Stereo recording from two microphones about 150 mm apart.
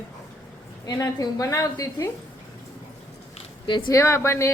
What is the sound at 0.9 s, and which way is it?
A woman's voice, 25° left (ahead or behind).